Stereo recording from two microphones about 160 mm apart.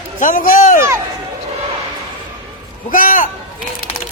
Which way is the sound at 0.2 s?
55° left (ahead or behind).